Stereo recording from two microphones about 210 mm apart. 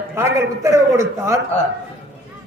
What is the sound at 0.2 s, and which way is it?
A man's voice, 15° right (ahead or behind).